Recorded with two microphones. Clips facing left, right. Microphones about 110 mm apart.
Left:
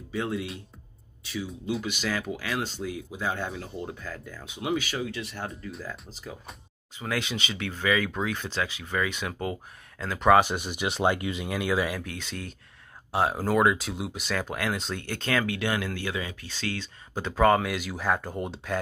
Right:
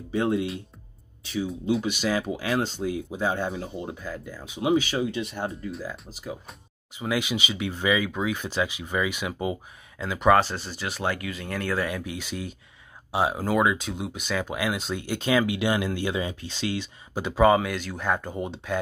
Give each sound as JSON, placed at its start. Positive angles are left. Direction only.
{"t": 0.1, "sound": "speech", "side_deg": -25}
{"t": 1.9, "sound": "speech", "side_deg": -20}
{"t": 4.6, "sound": "speech", "side_deg": -25}
{"t": 5.7, "sound": "speech", "side_deg": -5}
{"t": 10.3, "sound": "speech", "side_deg": 15}
{"t": 11.4, "sound": "speech", "side_deg": 10}
{"t": 12.0, "sound": "speech", "side_deg": -5}